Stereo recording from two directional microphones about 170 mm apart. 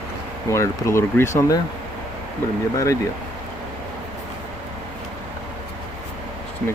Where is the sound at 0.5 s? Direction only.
15° left (ahead or behind).